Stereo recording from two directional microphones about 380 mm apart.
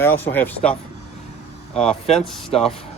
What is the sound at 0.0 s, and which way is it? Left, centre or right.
Speech, centre.